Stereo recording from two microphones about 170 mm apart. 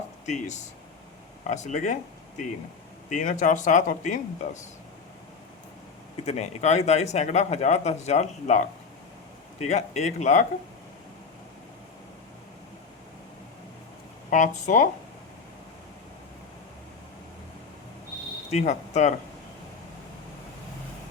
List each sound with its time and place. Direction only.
0.3 s speech: 45° left (ahead or behind)
3.1 s speech: 50° left (ahead or behind)
6.2 s speech: 40° left (ahead or behind)
14.3 s speech: 50° left (ahead or behind)
18.5 s speech: 45° left (ahead or behind)